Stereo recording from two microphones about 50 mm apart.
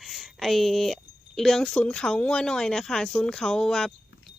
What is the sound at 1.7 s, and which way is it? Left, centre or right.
A woman's voice, left.